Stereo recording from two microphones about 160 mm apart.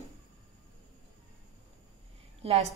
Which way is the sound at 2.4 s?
40° right (ahead or behind).